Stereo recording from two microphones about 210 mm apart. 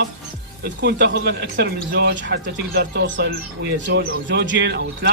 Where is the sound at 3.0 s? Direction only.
55° right (ahead or behind).